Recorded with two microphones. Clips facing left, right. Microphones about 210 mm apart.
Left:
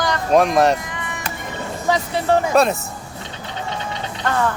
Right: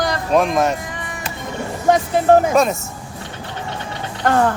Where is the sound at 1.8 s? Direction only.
50° right (ahead or behind).